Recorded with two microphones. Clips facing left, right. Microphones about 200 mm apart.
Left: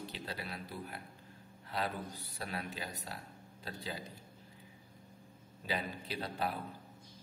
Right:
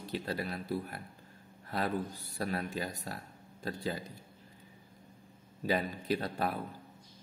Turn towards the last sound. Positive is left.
turn(degrees=-50)  # may be behind; listen again after turning